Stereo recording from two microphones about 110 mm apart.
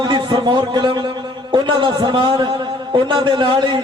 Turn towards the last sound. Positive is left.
turn(degrees=-45)  # may be behind; listen again after turning